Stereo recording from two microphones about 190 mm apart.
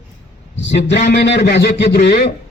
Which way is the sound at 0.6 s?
65° left (ahead or behind).